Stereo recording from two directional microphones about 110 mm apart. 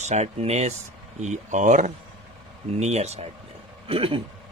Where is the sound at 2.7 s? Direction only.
85° right.